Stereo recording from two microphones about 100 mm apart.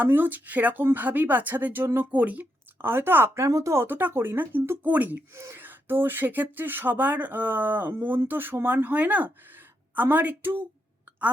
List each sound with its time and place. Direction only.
0.0 s speech: 20° right (ahead or behind)
5.3 s speech: 30° right (ahead or behind)